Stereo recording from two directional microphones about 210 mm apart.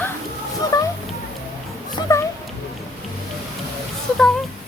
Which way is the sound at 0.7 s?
20° left (ahead or behind).